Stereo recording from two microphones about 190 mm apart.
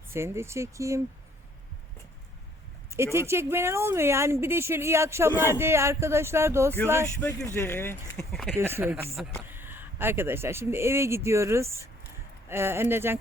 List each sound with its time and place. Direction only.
0.1 s a woman's voice: 15° right (ahead or behind)
2.9 s a woman's voice: 15° right (ahead or behind)
7.2 s speech: 10° left (ahead or behind)
8.3 s speech: centre (ahead or behind)
8.5 s a woman's voice: 10° right (ahead or behind)